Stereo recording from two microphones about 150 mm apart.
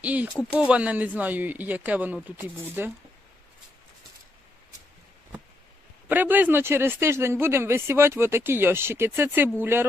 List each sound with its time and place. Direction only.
0.0 s speech: 10° right (ahead or behind)
6.1 s speech: 10° right (ahead or behind)